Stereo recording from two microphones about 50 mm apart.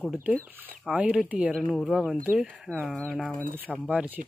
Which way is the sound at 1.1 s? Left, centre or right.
Right.